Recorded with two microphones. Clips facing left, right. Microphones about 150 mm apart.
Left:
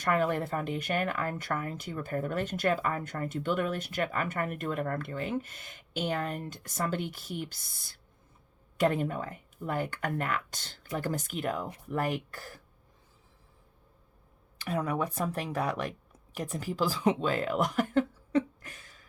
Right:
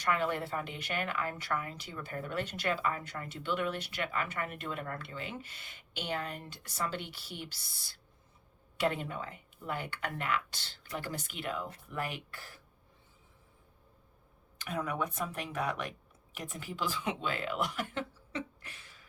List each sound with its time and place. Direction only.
0.0 s speech: 45° left (ahead or behind)
14.6 s speech: 35° left (ahead or behind)